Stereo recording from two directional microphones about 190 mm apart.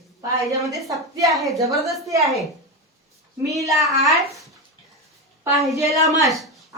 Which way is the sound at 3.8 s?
Centre (ahead or behind).